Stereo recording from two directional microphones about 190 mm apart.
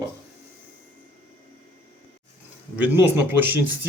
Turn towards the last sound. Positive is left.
turn(degrees=-10)  # may be behind; listen again after turning